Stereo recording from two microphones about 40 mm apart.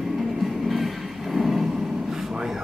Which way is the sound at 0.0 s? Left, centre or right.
Centre.